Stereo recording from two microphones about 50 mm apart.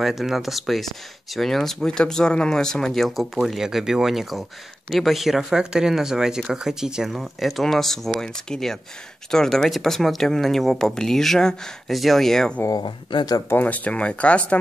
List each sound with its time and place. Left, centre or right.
0.0 s speech: centre
3.6 s speech: centre
13.6 s speech: left